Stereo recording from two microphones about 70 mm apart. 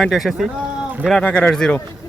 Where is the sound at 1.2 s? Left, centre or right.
Left.